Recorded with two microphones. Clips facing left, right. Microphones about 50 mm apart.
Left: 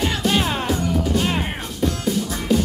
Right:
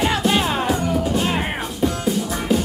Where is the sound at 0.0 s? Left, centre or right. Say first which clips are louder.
Right 2 dB; centre.